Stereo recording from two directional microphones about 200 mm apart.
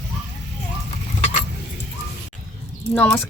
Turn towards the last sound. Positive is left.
turn(degrees=10)  # may be behind; listen again after turning